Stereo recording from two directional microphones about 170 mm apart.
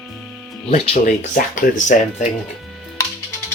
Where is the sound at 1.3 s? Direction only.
50° left (ahead or behind).